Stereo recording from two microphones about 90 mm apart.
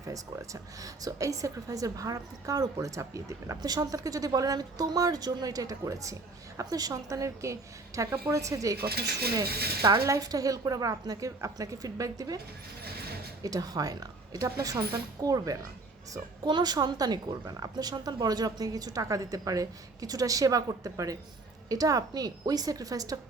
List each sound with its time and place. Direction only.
0.0 s a woman's voice: 40° right (ahead or behind)
9.8 s speech: 40° right (ahead or behind)
13.4 s a woman's voice: 45° right (ahead or behind)
16.1 s speech: 55° right (ahead or behind)